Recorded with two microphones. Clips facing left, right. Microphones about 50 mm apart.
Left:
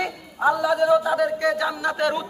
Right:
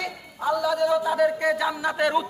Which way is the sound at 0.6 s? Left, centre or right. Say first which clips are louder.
Left 2 dB; centre.